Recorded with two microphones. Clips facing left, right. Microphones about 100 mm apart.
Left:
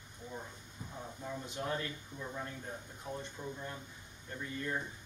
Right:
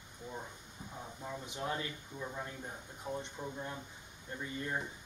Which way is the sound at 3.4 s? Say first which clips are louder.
Even; 15° right (ahead or behind).